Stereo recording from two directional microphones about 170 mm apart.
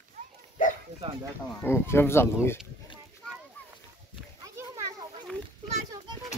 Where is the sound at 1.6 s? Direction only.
15° left (ahead or behind).